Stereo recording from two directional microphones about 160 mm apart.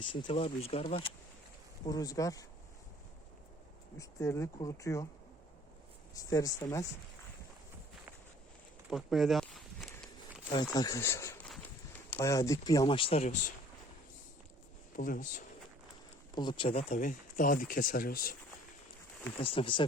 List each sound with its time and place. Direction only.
0.1 s speech: 30° left (ahead or behind)
1.9 s speech: 25° left (ahead or behind)
3.9 s speech: 20° left (ahead or behind)
6.1 s speech: 20° left (ahead or behind)
8.9 s speech: centre (ahead or behind)
10.5 s speech: 25° left (ahead or behind)
11.4 s a sound: 5° left (ahead or behind)
12.2 s speech: 20° left (ahead or behind)
12.8 s speech: 35° left (ahead or behind)
14.9 s speech: 55° left (ahead or behind)
16.3 s speech: 30° left (ahead or behind)
17.0 s speech: 55° left (ahead or behind)
19.4 s speech: 35° left (ahead or behind)